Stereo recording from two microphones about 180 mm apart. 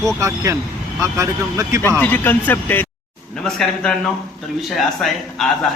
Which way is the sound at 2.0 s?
10° left (ahead or behind).